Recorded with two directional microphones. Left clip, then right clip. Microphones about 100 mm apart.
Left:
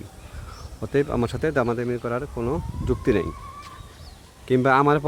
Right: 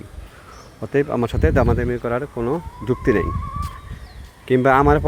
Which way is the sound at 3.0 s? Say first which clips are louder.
Right 4 dB; 5° right (ahead or behind).